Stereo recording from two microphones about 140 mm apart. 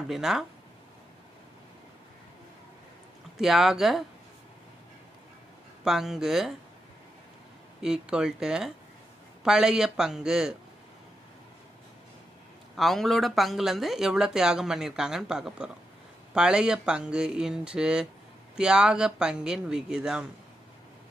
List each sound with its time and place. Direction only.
0.1 s speech: centre (ahead or behind)
3.3 s speech: centre (ahead or behind)
5.9 s speech: 5° right (ahead or behind)
7.8 s speech: 5° right (ahead or behind)
12.7 s speech: centre (ahead or behind)